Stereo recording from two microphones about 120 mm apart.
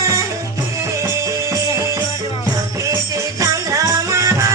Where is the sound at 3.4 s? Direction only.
25° right (ahead or behind).